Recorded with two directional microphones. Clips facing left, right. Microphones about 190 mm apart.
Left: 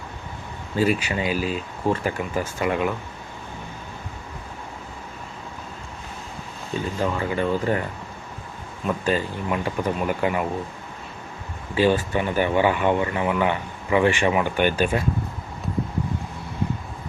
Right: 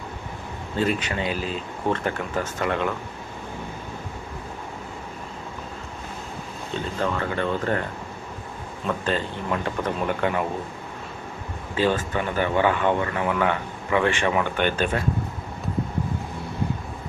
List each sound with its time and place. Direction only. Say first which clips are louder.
0.8 s speech: left 2 dB; 10° left (ahead or behind)
7.0 s speech: left 1 dB; 10° left (ahead or behind)
8.9 s speech: left 2 dB; 10° left (ahead or behind)
11.8 s speech: left 3 dB; 15° left (ahead or behind)